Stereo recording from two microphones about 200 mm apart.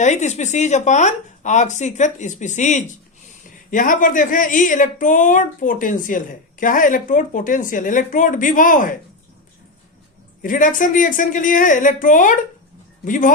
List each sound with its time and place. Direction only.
0.0 s a woman's voice: 35° left (ahead or behind)
10.4 s a woman's voice: 40° left (ahead or behind)